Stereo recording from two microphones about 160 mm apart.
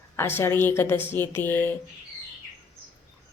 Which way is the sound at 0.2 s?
15° left (ahead or behind).